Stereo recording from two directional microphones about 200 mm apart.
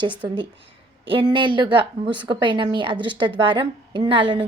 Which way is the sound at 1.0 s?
25° right (ahead or behind).